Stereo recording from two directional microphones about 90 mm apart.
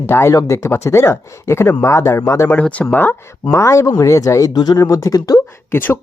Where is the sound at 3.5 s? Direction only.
35° left (ahead or behind).